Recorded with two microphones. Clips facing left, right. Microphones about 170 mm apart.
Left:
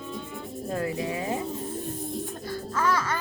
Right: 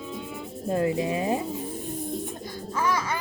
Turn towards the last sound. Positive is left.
turn(degrees=-10)  # may be behind; listen again after turning